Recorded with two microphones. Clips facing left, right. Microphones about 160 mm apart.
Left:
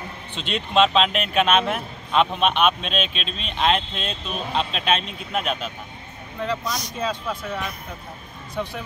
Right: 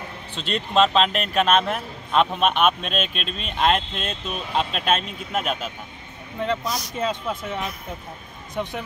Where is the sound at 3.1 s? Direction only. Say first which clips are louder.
Right 1 dB; 50° right (ahead or behind).